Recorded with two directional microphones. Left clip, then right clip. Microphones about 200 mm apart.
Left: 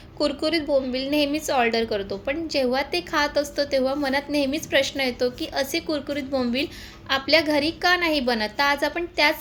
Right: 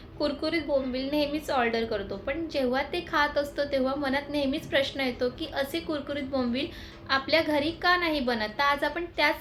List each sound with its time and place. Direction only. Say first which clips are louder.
0.2 s a woman's voice: left 5 dB; 45° left (ahead or behind)